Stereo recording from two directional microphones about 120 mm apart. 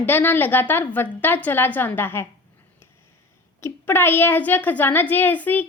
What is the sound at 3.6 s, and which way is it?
A child's voice, 20° left (ahead or behind).